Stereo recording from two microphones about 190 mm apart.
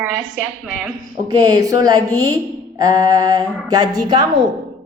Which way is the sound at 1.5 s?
20° right (ahead or behind).